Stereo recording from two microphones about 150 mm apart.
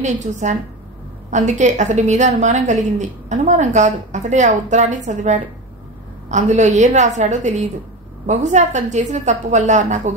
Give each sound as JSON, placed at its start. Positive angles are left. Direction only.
{"t": 0.0, "sound": "a woman's voice", "side_deg": -50}